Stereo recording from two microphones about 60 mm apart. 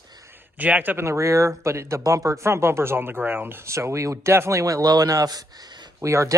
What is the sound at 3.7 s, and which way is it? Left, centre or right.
Speech, right.